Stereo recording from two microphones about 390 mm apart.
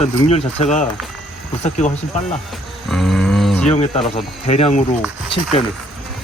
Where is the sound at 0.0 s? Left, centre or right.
Centre.